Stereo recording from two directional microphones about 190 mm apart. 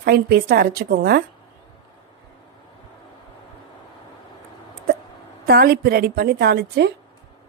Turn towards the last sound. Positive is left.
turn(degrees=-55)  # may be behind; listen again after turning